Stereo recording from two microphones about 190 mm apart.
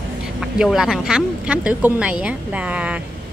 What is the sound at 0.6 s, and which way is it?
Speech, centre (ahead or behind).